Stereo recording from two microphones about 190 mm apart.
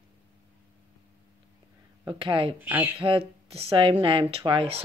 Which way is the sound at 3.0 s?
30° right (ahead or behind).